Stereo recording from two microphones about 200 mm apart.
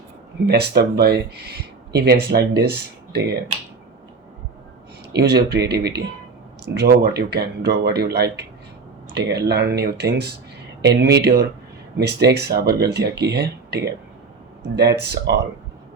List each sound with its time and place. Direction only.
0.4 s speech: 55° right (ahead or behind)
5.1 s speech: 55° right (ahead or behind)